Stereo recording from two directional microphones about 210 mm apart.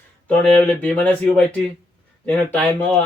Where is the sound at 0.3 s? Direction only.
5° left (ahead or behind).